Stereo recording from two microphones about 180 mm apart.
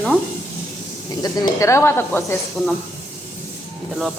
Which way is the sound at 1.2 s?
15° left (ahead or behind).